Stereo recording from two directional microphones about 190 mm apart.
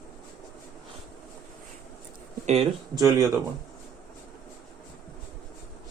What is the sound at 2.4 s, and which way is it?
Speech, 35° right (ahead or behind).